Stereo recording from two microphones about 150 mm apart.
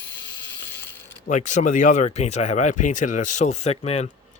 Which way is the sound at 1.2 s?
55° left (ahead or behind).